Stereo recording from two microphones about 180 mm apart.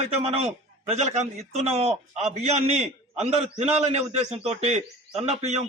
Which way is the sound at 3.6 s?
35° right (ahead or behind).